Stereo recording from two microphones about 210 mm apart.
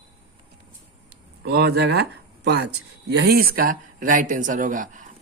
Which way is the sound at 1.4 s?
50° right (ahead or behind).